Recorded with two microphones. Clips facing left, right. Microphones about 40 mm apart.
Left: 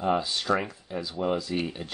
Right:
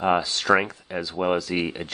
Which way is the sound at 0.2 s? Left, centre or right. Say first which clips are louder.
Right 6 dB; right.